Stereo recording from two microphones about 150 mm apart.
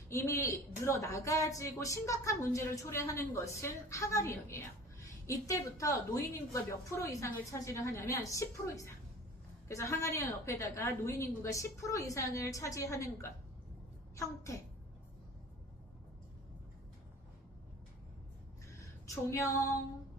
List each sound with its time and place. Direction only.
0.1 s speech: 20° left (ahead or behind)
19.0 s female singing: 20° left (ahead or behind)